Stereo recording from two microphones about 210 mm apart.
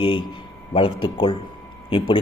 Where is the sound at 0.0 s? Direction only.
25° left (ahead or behind).